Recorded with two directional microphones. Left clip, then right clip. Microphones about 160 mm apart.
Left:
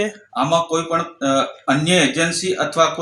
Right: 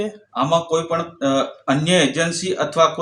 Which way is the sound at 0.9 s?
30° right (ahead or behind).